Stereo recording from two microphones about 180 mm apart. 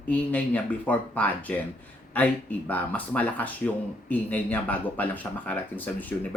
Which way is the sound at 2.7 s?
10° left (ahead or behind).